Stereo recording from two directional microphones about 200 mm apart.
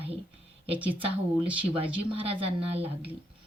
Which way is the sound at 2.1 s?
25° right (ahead or behind).